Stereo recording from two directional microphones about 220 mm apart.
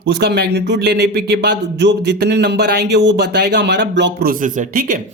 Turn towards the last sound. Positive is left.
turn(degrees=-40)  # may be behind; listen again after turning